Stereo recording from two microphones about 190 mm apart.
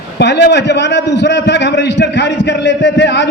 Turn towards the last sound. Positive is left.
turn(degrees=65)  # may be behind; listen again after turning